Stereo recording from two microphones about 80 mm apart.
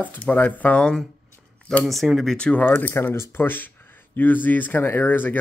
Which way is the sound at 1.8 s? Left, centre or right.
Centre.